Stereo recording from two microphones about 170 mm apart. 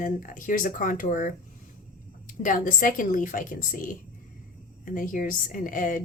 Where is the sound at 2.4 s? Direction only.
50° left (ahead or behind).